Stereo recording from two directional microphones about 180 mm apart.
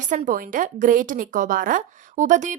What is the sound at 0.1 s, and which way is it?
A woman's voice, 45° right (ahead or behind).